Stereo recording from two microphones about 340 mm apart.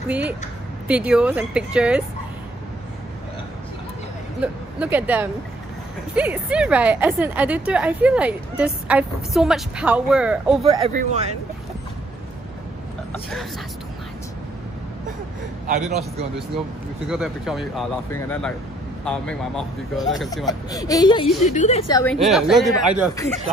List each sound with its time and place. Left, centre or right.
0.8 s speech: centre
4.4 s speech: centre
10.6 s speech: centre
13.1 s speech: centre
17.1 s speech: centre
22.0 s speech: centre